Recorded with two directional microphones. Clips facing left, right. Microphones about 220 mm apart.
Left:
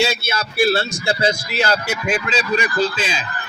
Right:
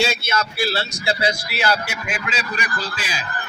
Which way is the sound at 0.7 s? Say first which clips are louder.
Left 4 dB; 50° left (ahead or behind).